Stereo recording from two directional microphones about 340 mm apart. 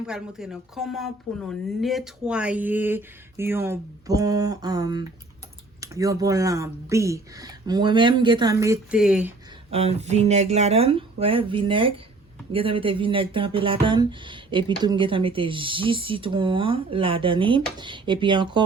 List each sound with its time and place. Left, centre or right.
0.0 s speech: centre
9.6 s speech: centre